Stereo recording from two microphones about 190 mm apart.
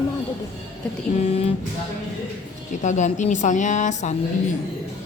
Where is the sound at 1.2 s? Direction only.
30° left (ahead or behind).